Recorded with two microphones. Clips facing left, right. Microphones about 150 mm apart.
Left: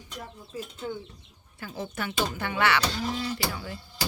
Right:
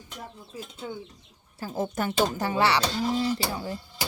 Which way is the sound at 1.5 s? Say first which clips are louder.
Right 6 dB; 40° right (ahead or behind).